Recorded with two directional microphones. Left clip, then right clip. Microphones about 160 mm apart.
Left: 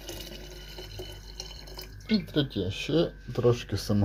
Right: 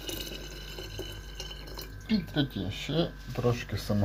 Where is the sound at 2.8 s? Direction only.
90° left.